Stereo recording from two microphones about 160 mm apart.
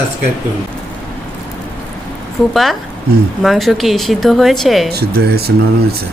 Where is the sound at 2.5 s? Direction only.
Centre (ahead or behind).